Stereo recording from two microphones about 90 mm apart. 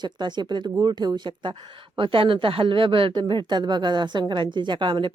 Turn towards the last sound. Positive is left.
turn(degrees=-60)  # may be behind; listen again after turning